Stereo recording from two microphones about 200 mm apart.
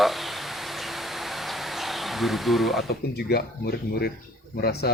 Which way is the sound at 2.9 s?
50° left (ahead or behind).